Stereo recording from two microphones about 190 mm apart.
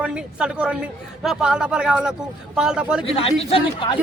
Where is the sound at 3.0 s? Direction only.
30° left (ahead or behind).